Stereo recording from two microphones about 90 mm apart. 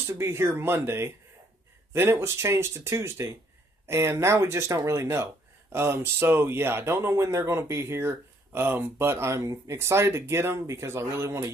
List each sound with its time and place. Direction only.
0.1 s speech: 30° right (ahead or behind)